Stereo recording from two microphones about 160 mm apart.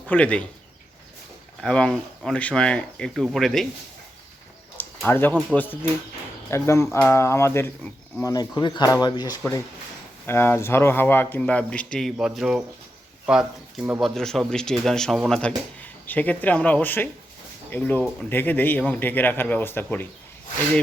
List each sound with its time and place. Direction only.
0.1 s speech: 10° left (ahead or behind)
1.6 s speech: 5° left (ahead or behind)
4.8 s a sound: 15° left (ahead or behind)
5.5 s speech: 10° left (ahead or behind)
10.2 s speech: 15° left (ahead or behind)